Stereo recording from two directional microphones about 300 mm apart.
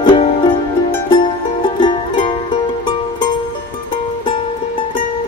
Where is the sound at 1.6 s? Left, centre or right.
Centre.